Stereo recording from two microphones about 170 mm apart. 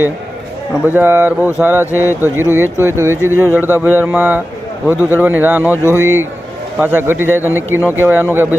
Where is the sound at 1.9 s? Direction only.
15° left (ahead or behind).